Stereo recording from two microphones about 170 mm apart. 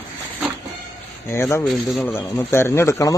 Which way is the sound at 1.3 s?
15° left (ahead or behind).